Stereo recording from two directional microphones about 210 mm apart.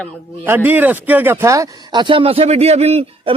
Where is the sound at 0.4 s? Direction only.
10° right (ahead or behind).